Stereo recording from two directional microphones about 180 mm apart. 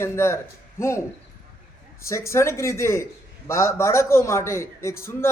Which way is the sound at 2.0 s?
15° left (ahead or behind).